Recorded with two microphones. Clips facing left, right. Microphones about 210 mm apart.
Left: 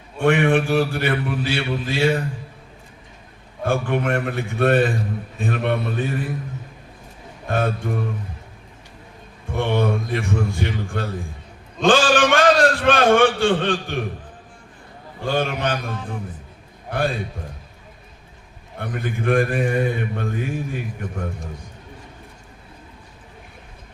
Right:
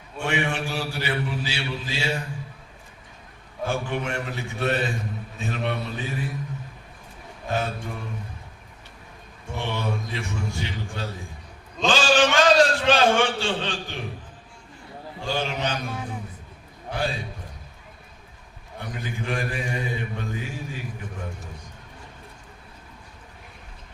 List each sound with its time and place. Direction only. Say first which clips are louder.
0.2 s mantra: left 9 dB; 55° left (ahead or behind)
3.7 s mantra: left 7 dB; 55° left (ahead or behind)
7.4 s speech: left 5 dB; 55° left (ahead or behind)
9.6 s mantra: left 8 dB; 55° left (ahead or behind)
11.8 s a man's voice: left 4 dB; 55° left (ahead or behind)
15.2 s mantra: left 5 dB; 55° left (ahead or behind)
16.9 s mantra: left 5 dB; 55° left (ahead or behind)
18.8 s mantra: left 6 dB; 55° left (ahead or behind)